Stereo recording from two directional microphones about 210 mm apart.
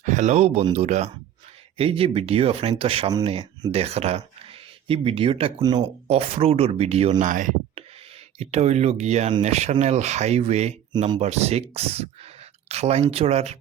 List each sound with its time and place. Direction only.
0.0 s speech: 35° right (ahead or behind)